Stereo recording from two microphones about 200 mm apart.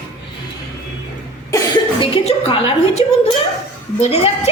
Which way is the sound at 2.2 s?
30° left (ahead or behind).